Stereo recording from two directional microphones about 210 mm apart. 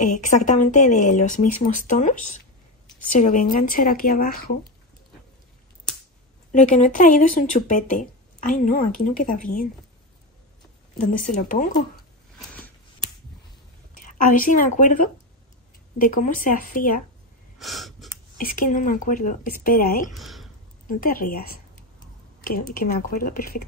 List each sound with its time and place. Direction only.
0.0 s speech: 35° left (ahead or behind)
6.5 s speech: 35° left (ahead or behind)
11.0 s speech: 40° left (ahead or behind)
12.4 s a sound: 10° left (ahead or behind)
13.9 s a woman's voice: 40° left (ahead or behind)
17.6 s gasp: centre (ahead or behind)
18.4 s speech: 40° left (ahead or behind)
20.1 s speech: centre (ahead or behind)
20.8 s speech: 45° left (ahead or behind)